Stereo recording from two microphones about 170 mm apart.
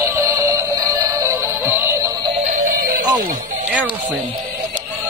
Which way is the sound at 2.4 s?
50° right (ahead or behind).